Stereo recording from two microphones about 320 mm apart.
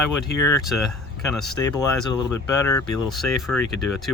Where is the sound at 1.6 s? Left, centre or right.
Centre.